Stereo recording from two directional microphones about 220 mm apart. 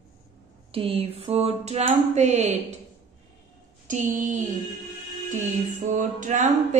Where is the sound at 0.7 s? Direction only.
25° right (ahead or behind).